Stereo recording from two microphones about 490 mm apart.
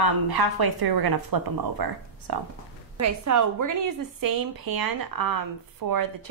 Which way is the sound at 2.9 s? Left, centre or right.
Right.